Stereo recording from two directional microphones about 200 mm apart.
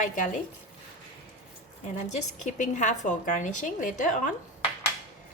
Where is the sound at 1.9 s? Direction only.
40° left (ahead or behind).